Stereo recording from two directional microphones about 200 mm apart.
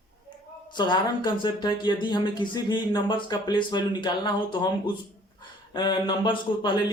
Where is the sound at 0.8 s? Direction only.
20° left (ahead or behind).